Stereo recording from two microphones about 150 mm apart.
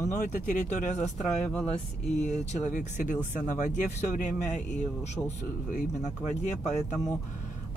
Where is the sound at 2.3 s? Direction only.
50° left (ahead or behind).